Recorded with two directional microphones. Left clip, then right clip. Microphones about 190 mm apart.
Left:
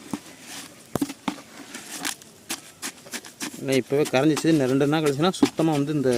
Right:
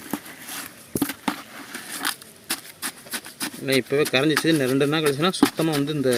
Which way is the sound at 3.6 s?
10° left (ahead or behind).